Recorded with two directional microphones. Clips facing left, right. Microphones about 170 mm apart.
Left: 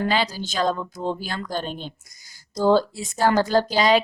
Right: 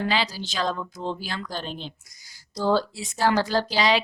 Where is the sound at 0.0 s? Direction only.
50° left (ahead or behind).